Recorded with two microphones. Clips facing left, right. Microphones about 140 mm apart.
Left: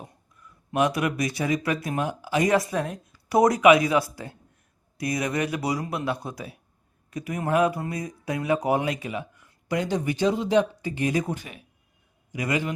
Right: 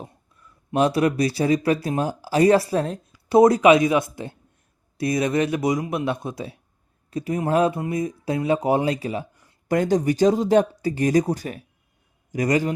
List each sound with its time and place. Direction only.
0.7 s speech: 30° right (ahead or behind)
9.6 s speech: 45° right (ahead or behind)